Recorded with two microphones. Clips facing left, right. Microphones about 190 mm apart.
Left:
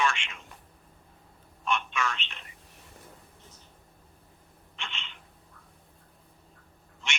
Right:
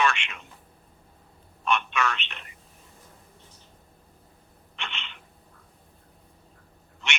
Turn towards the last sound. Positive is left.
turn(degrees=-65)  # may be behind; listen again after turning